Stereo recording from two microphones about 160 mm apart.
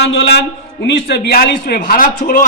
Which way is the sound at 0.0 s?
90° left.